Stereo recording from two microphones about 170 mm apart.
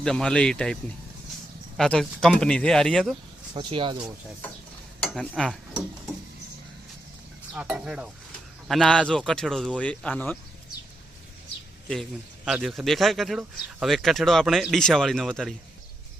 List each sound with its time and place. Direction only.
0.0 s speech: 5° left (ahead or behind)
3.5 s speech: 30° right (ahead or behind)
5.0 s stir: 5° left (ahead or behind)
7.5 s cutlery: 10° right (ahead or behind)
8.6 s speech: centre (ahead or behind)
12.5 s speech: centre (ahead or behind)